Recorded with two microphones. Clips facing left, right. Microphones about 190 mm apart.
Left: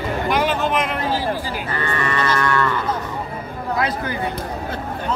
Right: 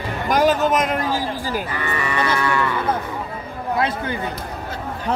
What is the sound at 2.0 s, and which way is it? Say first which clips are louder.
Livestock: even; 10° right (ahead or behind).